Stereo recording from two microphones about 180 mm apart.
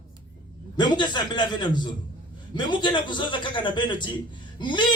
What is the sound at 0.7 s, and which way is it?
A man's voice, 25° left (ahead or behind).